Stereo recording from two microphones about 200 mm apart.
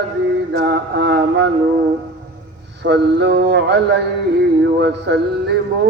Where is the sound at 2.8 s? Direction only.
60° right (ahead or behind).